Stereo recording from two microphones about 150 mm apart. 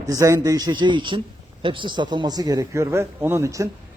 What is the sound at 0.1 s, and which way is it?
A man's voice, 20° right (ahead or behind).